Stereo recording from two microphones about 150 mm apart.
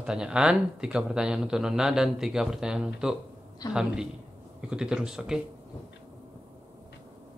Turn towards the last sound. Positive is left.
turn(degrees=-5)  # may be behind; listen again after turning